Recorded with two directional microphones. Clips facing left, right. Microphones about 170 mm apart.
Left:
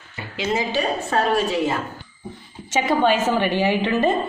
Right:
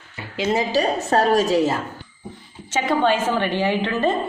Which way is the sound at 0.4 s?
35° right (ahead or behind).